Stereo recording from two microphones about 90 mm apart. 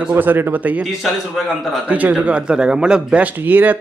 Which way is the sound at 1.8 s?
15° right (ahead or behind).